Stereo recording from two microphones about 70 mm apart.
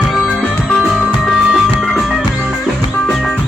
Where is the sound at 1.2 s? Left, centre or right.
Centre.